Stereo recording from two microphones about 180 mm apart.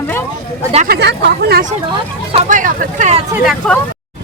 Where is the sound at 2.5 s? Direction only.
45° right (ahead or behind).